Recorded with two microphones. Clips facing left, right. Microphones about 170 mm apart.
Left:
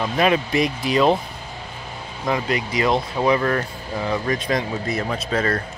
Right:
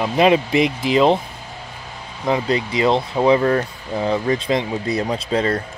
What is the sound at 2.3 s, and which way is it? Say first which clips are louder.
Speech: right 3 dB; 25° right (ahead or behind).